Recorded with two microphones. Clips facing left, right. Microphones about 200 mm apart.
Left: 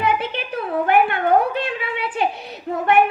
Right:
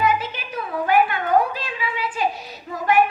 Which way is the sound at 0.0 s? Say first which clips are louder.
Left 1 dB; 60° left (ahead or behind).